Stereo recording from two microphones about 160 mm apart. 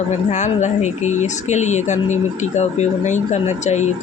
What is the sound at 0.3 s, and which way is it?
Speech, 45° left (ahead or behind).